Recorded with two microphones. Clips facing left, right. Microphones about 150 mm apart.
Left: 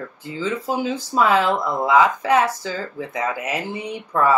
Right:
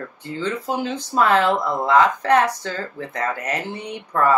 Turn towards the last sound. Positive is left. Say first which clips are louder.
# even
turn(degrees=5)  # may be behind; listen again after turning